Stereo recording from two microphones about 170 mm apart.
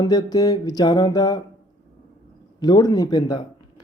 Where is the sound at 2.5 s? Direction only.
25° left (ahead or behind).